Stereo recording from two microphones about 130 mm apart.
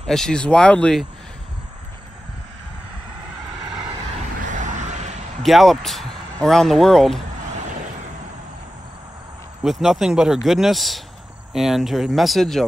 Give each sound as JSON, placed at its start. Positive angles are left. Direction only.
{"t": 0.0, "sound": "speech", "side_deg": 5}
{"t": 4.5, "sound": "a sound", "side_deg": -75}
{"t": 5.4, "sound": "speech", "side_deg": 0}
{"t": 9.6, "sound": "speech", "side_deg": 0}